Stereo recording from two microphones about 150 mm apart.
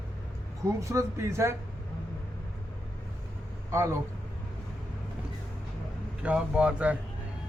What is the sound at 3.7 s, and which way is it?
Speech, 20° right (ahead or behind).